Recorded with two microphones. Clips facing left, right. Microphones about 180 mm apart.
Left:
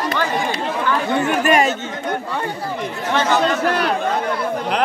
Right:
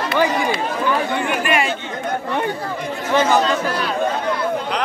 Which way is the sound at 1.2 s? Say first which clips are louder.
Left 4 dB; 45° left (ahead or behind).